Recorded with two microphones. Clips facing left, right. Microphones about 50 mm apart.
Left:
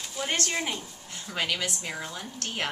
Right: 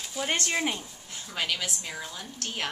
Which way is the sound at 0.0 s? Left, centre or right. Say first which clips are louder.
Right 1 dB; centre.